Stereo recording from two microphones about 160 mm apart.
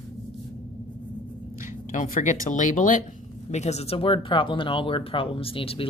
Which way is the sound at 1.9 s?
50° left (ahead or behind).